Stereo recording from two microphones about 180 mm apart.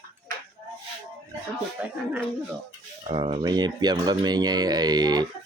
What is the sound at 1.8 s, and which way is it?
Speech, 5° right (ahead or behind).